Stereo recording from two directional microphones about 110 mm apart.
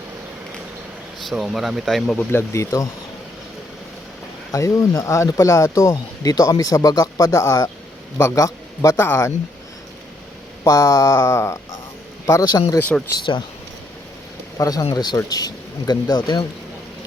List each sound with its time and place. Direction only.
1.3 s speech: centre (ahead or behind)
2.1 s speech: 25° left (ahead or behind)
4.5 s a man's voice: 30° left (ahead or behind)
10.6 s speech: 30° left (ahead or behind)
13.1 s speech: 45° left (ahead or behind)
14.6 s speech: 35° left (ahead or behind)